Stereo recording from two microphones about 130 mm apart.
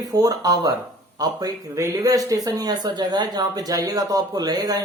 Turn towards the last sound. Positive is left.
turn(degrees=-30)  # may be behind; listen again after turning